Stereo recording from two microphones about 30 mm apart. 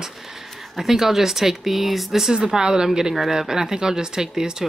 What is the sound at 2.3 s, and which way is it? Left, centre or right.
Speech, right.